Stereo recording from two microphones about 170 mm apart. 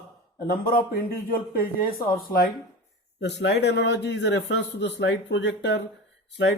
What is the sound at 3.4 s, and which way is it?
Speech, 90° left.